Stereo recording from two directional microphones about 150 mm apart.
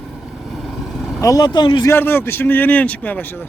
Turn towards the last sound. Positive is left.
turn(degrees=10)  # may be behind; listen again after turning